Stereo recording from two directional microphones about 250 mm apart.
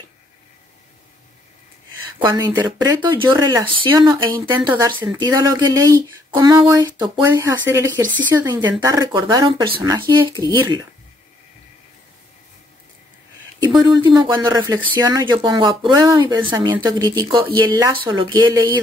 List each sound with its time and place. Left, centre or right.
2.1 s speech: centre
14.0 s speech: centre